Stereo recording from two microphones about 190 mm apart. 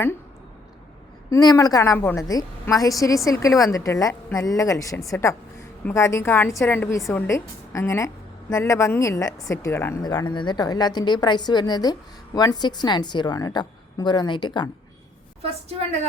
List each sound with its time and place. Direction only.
1.3 s a woman's voice: 20° left (ahead or behind)